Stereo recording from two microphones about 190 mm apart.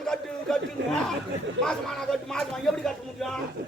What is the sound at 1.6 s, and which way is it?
Speech, 5° left (ahead or behind).